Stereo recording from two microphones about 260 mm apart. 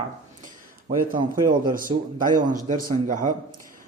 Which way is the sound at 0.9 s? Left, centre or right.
Centre.